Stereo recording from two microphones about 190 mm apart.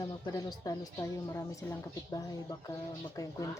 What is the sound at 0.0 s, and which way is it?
A woman's voice, 20° left (ahead or behind).